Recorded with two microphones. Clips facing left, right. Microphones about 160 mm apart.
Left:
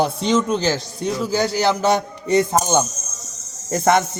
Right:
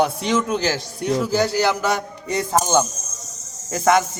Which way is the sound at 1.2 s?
20° left (ahead or behind).